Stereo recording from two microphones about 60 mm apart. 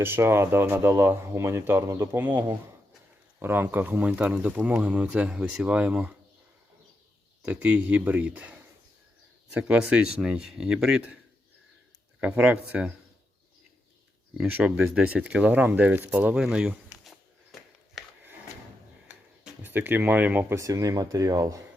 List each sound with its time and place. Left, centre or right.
0.0 s speech: right
2.1 s speech: right
3.4 s speech: right
4.1 s speech: centre
4.4 s speech: right
7.4 s speech: right
9.6 s speech: centre
12.2 s speech: right
14.5 s speech: right
16.3 s speech: centre
17.0 s a sound: centre
19.6 s speech: right
20.6 s speech: right